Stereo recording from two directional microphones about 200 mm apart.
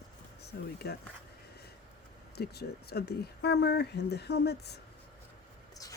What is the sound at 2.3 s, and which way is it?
Speech, 55° left (ahead or behind).